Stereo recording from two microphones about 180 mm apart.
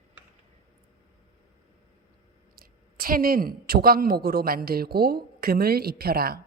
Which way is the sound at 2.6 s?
55° right (ahead or behind).